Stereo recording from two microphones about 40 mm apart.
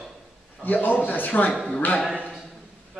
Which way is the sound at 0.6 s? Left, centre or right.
Left.